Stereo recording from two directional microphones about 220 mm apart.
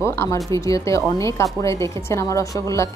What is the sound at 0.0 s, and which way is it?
Speech, 10° left (ahead or behind).